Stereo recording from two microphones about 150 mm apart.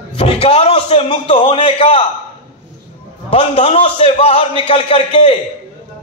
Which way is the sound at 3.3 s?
40° left (ahead or behind).